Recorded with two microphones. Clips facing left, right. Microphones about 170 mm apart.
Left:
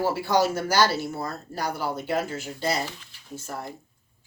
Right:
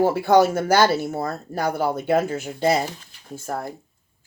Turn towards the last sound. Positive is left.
turn(degrees=-50)  # may be behind; listen again after turning